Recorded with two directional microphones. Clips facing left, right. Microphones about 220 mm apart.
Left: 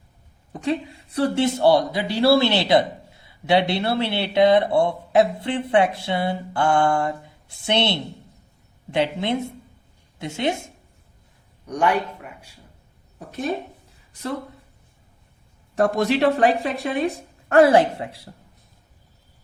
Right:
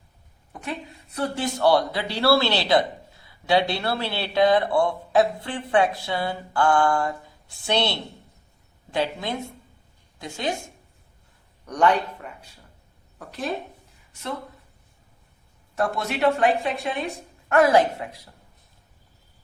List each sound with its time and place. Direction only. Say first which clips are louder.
0.5 s speech: left 9 dB; 30° left (ahead or behind)
11.6 s a man's voice: right 1 dB; 10° left (ahead or behind)
13.1 s speech: left 3 dB; 20° left (ahead or behind)
14.1 s speech: left 3 dB; 35° left (ahead or behind)
15.7 s speech: left 7 dB; 30° left (ahead or behind)